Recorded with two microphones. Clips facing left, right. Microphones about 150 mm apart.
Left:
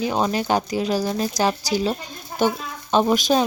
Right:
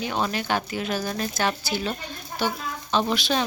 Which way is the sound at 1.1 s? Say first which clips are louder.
Left 5 dB; 20° left (ahead or behind).